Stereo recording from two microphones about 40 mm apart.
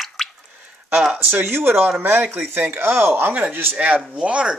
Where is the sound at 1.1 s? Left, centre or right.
Right.